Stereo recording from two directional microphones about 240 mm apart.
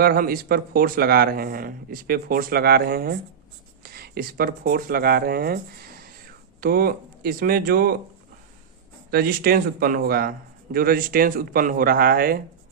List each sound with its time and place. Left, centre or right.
0.0 s a man's voice: right
6.6 s a man's voice: right
9.0 s a man's voice: right